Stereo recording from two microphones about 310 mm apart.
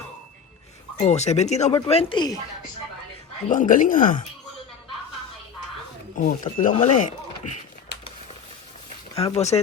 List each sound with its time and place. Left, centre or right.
0.9 s speech: left
3.5 s speech: left
6.1 s speech: left
7.0 s a sound: left
9.1 s speech: centre